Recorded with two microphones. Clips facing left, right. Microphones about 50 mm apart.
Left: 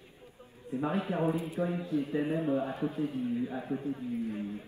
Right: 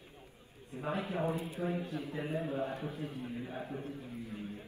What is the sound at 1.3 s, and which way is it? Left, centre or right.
Speech, left.